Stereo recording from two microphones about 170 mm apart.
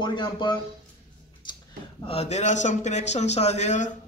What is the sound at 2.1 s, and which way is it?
A man's voice, 40° left (ahead or behind).